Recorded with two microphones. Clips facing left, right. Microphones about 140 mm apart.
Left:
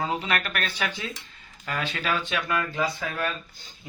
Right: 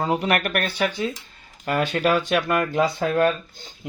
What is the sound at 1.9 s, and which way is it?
Speech, 50° right (ahead or behind).